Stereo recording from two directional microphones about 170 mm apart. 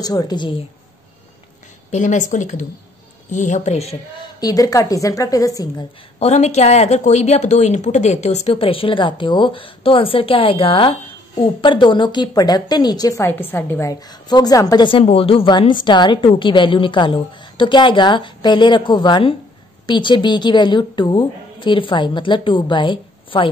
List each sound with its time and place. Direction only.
0.0 s a woman's voice: 25° left (ahead or behind)
1.9 s speech: 45° left (ahead or behind)
4.4 s a woman's voice: 20° left (ahead or behind)
6.1 s a woman's voice: 40° left (ahead or behind)